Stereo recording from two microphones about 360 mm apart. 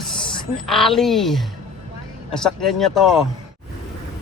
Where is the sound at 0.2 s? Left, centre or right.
Centre.